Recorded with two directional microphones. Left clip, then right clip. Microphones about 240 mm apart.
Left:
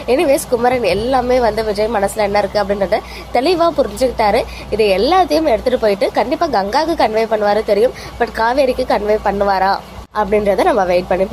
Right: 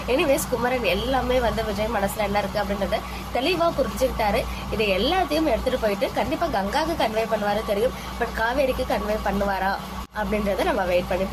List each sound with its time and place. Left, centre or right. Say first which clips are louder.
0.1 s a woman's voice: left 8 dB; centre